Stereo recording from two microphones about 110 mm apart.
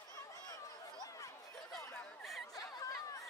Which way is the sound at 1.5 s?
5° left (ahead or behind).